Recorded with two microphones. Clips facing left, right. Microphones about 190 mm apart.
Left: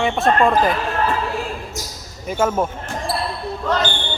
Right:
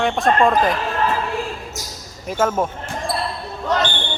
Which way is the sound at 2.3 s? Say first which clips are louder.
Even; centre (ahead or behind).